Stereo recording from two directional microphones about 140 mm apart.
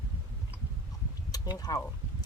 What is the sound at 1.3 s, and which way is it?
Speech, 25° left (ahead or behind).